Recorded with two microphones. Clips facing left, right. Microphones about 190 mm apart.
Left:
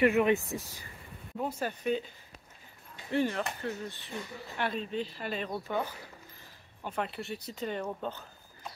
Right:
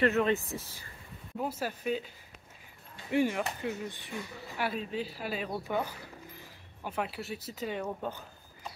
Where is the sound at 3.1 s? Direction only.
10° right (ahead or behind).